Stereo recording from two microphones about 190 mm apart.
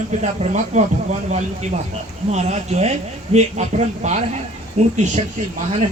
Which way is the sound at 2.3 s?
35° right (ahead or behind).